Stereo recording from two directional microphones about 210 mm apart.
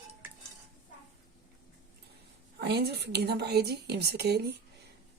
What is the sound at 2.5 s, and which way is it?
Speech, 50° right (ahead or behind).